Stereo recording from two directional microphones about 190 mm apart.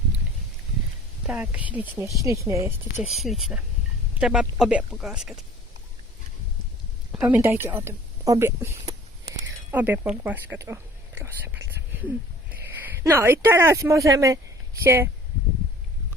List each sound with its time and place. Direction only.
1.3 s speech: 10° right (ahead or behind)
3.2 s speech: centre (ahead or behind)
7.1 s speech: 10° right (ahead or behind)